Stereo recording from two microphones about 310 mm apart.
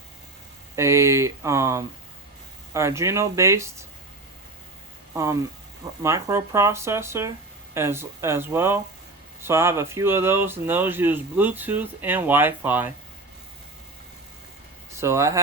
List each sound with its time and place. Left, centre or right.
0.8 s speech: centre
5.1 s speech: centre
14.9 s speech: centre